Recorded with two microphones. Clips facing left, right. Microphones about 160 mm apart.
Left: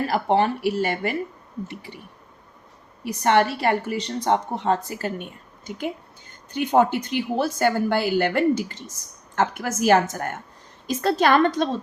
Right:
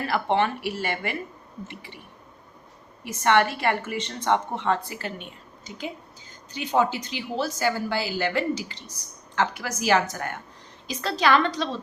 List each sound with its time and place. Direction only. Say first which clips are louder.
0.1 s speech: left 1 dB; 40° left (ahead or behind)
3.2 s a woman's voice: left 2 dB; 40° left (ahead or behind)